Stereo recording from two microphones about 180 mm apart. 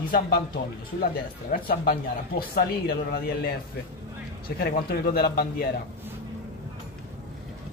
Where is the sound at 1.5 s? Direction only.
60° left (ahead or behind).